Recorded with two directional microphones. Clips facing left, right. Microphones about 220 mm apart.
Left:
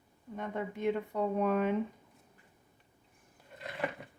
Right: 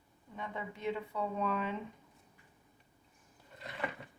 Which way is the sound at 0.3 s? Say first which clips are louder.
Left 6 dB; 50° left (ahead or behind).